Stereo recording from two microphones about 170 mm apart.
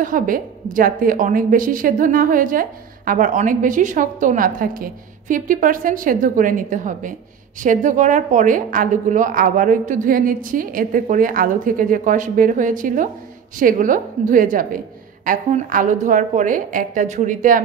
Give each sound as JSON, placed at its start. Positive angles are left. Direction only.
{"t": 0.0, "sound": "a woman's voice", "side_deg": -55}